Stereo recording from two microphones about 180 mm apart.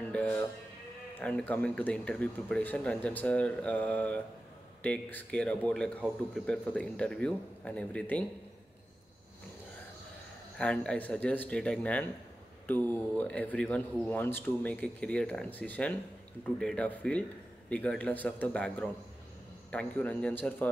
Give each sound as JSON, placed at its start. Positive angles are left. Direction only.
{"t": 0.1, "sound": "music", "side_deg": 5}
{"t": 1.1, "sound": "a man's voice", "side_deg": 5}
{"t": 10.6, "sound": "a man's voice", "side_deg": 5}